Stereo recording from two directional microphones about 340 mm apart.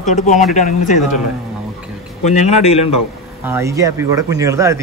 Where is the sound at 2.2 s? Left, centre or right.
Centre.